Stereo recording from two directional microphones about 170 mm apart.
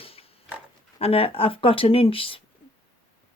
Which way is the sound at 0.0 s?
35° left (ahead or behind).